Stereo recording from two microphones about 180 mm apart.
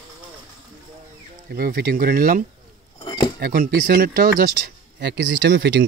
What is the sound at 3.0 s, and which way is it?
Cutlery, 25° left (ahead or behind).